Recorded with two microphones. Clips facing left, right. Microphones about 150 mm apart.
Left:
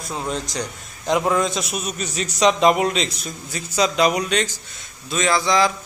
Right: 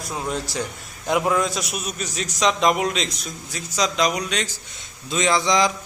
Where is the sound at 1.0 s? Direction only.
5° right (ahead or behind).